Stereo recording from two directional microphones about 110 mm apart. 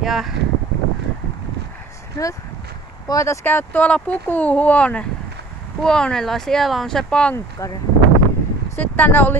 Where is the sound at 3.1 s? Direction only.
30° left (ahead or behind).